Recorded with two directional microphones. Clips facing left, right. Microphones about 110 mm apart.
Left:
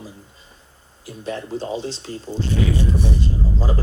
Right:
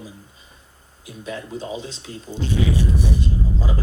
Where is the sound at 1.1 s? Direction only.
30° left (ahead or behind).